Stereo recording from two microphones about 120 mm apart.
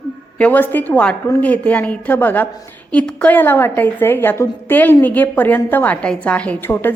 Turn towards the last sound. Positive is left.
turn(degrees=15)  # may be behind; listen again after turning